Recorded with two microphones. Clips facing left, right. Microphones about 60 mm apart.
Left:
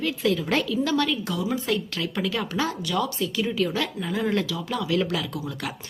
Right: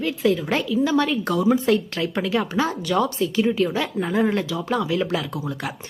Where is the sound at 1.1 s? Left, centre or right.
Right.